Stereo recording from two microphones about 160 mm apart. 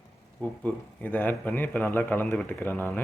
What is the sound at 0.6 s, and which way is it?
Speech, 10° left (ahead or behind).